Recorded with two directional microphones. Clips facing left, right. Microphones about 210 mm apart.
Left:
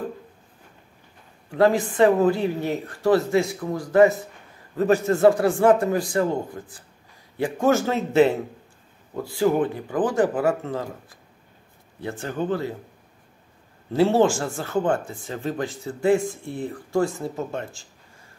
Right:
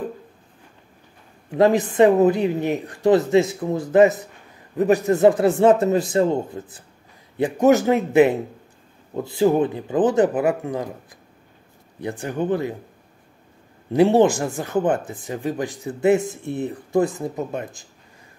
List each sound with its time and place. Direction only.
1.5 s speech: 20° right (ahead or behind)
12.0 s speech: 15° right (ahead or behind)
13.9 s speech: 15° right (ahead or behind)